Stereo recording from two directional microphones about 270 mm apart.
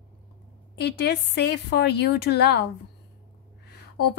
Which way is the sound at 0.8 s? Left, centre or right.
Left.